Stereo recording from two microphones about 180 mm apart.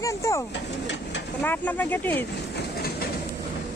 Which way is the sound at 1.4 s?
10° left (ahead or behind).